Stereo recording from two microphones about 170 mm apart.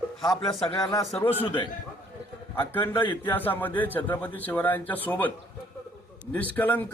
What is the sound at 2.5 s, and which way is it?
A man's voice, 10° left (ahead or behind).